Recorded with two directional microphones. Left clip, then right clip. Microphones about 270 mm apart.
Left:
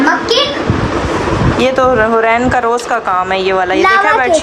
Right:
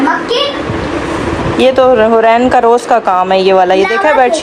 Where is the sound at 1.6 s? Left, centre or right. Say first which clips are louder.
Right 4 dB; centre.